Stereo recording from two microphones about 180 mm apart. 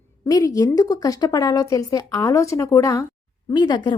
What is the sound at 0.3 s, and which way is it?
A woman's voice, 20° left (ahead or behind).